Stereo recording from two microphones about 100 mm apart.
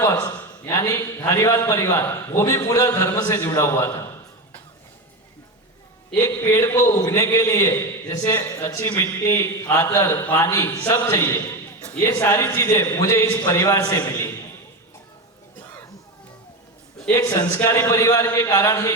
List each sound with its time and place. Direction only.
0.0 s a sound: 30° left (ahead or behind)
0.3 s a man's voice: 25° left (ahead or behind)
6.1 s a man's voice: 30° left (ahead or behind)
17.5 s a man's voice: 25° left (ahead or behind)